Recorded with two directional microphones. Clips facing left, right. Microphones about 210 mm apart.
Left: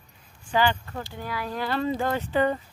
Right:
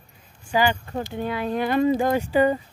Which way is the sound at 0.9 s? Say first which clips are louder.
Right 7 dB; 20° right (ahead or behind).